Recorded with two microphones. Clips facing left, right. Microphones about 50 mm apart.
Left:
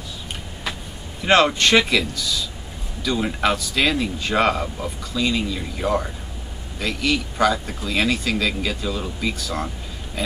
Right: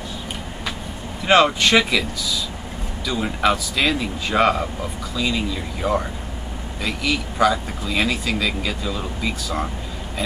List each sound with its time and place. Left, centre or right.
1.2 s speech: centre